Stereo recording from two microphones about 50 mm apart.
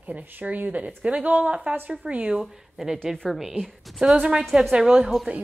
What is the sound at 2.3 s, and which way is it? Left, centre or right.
Speech, centre.